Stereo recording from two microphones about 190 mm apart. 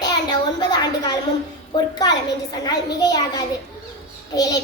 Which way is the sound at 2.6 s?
20° left (ahead or behind).